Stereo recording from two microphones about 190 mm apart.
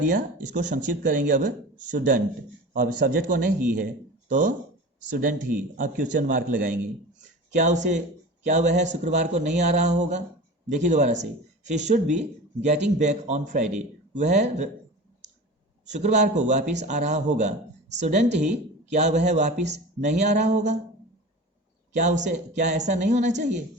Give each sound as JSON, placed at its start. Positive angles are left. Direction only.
{"t": 0.0, "sound": "speech", "side_deg": -45}
{"t": 5.7, "sound": "speech", "side_deg": -45}
{"t": 15.9, "sound": "speech", "side_deg": -35}
{"t": 21.9, "sound": "speech", "side_deg": -40}